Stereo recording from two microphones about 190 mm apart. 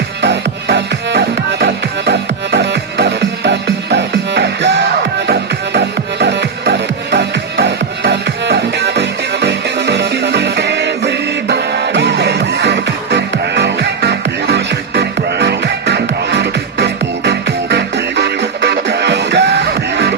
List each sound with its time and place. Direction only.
0.2 s music: 65° right (ahead or behind)